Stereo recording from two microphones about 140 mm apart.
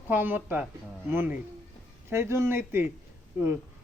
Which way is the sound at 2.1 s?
20° right (ahead or behind).